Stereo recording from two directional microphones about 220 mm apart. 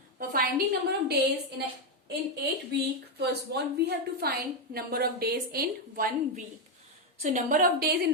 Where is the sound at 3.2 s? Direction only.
50° right (ahead or behind).